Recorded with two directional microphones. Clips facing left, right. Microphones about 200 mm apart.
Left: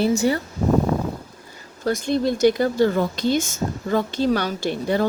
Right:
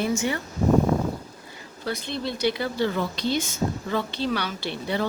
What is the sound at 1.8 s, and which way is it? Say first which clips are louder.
Speech: left 9 dB; 45° left (ahead or behind).